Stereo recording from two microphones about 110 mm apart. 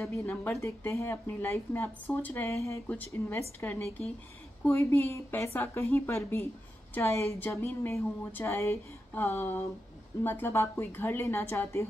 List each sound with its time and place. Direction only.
0.5 s speech: 25° left (ahead or behind)
2.5 s speech: 25° left (ahead or behind)